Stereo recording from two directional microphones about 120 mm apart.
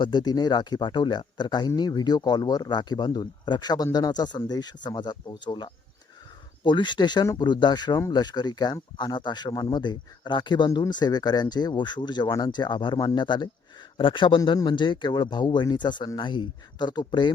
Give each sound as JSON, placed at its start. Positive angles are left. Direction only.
{"t": 0.0, "sound": "speech", "side_deg": 35}